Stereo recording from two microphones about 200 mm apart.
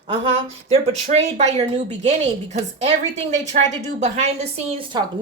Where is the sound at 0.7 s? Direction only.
30° right (ahead or behind).